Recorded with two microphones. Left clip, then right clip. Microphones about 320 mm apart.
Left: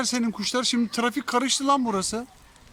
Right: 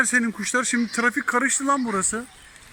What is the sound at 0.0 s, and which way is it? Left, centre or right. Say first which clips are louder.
Speech: right 6 dB; centre.